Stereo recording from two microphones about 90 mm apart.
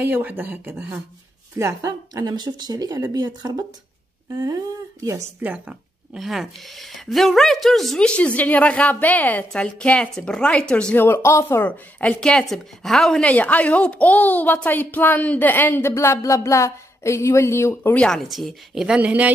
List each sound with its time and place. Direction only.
0.0 s speech: 20° right (ahead or behind)
1.6 s speech: 40° right (ahead or behind)
5.4 s speech: 15° right (ahead or behind)
6.1 s a woman's voice: centre (ahead or behind)
11.0 s speech: 20° left (ahead or behind); by 13.3 s 5° left (ahead or behind)
13.3 s a woman's voice: 15° left (ahead or behind)
17.9 s a woman's voice: 5° left (ahead or behind)
18.9 s speech: 15° right (ahead or behind)